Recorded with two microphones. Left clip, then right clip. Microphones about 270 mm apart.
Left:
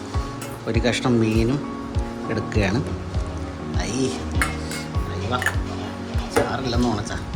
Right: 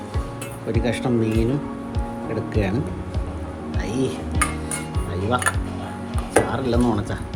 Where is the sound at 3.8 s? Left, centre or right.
Centre.